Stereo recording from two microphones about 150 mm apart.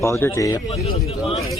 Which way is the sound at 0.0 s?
15° left (ahead or behind).